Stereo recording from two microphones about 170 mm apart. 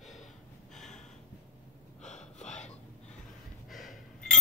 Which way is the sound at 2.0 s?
45° left (ahead or behind).